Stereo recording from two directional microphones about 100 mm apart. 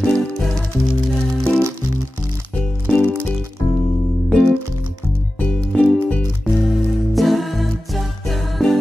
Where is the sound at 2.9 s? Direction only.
15° left (ahead or behind).